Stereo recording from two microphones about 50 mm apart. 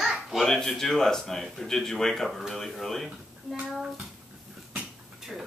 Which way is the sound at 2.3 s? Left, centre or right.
Centre.